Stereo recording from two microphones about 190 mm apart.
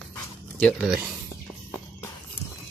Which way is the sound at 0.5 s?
Centre (ahead or behind).